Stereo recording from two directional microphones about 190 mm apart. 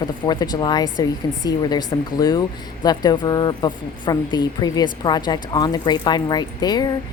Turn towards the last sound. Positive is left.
turn(degrees=20)  # may be behind; listen again after turning